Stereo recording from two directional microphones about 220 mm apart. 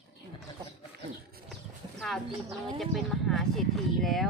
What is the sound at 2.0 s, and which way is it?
A woman's voice, centre (ahead or behind).